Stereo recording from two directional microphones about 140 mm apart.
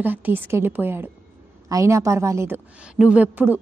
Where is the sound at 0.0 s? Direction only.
15° right (ahead or behind).